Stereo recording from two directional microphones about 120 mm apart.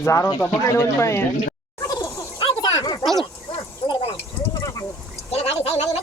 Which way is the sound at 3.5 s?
40° left (ahead or behind).